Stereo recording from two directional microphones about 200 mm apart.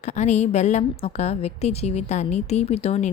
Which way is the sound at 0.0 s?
35° left (ahead or behind).